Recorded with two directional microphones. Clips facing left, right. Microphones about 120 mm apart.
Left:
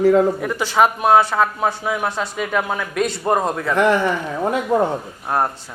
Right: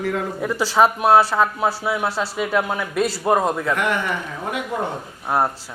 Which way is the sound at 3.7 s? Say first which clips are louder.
Left 5 dB; 30° left (ahead or behind).